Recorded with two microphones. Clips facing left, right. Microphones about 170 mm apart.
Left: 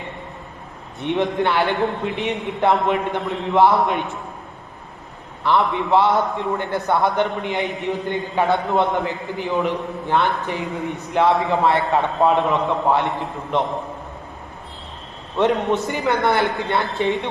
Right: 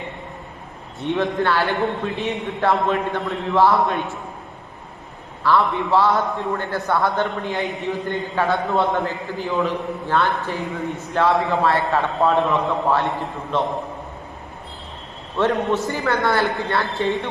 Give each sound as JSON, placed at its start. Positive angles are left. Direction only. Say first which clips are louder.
{"t": 0.9, "sound": "a man's voice", "louder": "left 1 dB", "side_deg": 20}
{"t": 5.4, "sound": "a man's voice", "louder": "even", "side_deg": 20}
{"t": 15.4, "sound": "a man's voice", "louder": "left 1 dB", "side_deg": 20}